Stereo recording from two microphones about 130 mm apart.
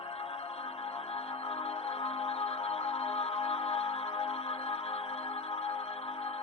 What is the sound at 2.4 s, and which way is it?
Music, 50° left (ahead or behind).